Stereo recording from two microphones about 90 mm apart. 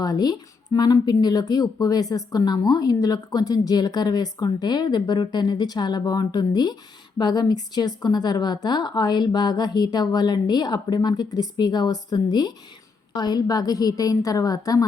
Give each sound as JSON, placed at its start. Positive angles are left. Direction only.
{"t": 0.0, "sound": "speech", "side_deg": 45}